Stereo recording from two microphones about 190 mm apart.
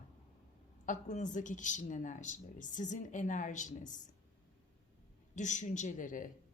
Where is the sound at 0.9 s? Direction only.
40° left (ahead or behind).